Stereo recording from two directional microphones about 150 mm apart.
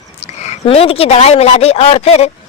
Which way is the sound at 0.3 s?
45° left (ahead or behind).